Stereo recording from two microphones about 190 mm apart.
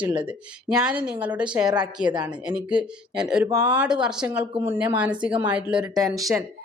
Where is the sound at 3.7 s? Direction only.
5° right (ahead or behind).